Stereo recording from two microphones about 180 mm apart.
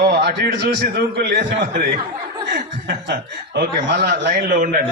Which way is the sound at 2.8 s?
65° right (ahead or behind).